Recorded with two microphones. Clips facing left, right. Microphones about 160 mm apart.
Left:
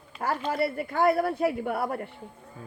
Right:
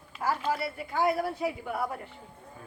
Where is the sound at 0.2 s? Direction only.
60° left (ahead or behind).